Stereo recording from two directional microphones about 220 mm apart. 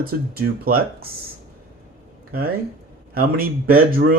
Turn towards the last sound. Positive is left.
turn(degrees=-40)  # may be behind; listen again after turning